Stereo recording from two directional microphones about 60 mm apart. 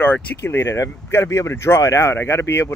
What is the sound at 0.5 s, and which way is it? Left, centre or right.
Speech, left.